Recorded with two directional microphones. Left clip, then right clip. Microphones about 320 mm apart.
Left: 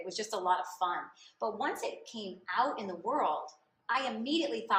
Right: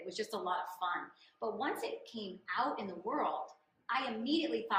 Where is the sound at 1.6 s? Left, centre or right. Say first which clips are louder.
Left 3 dB; left.